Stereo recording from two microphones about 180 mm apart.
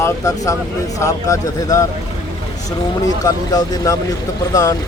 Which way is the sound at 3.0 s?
20° left (ahead or behind).